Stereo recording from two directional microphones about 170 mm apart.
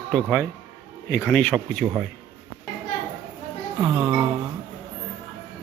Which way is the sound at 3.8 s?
25° right (ahead or behind).